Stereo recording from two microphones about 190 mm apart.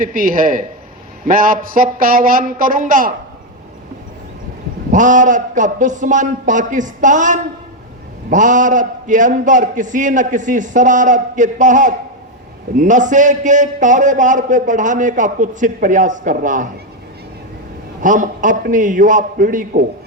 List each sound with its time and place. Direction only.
0.0 s speech: 45° right (ahead or behind)
4.9 s a man's voice: 40° right (ahead or behind)
18.0 s speech: 40° right (ahead or behind)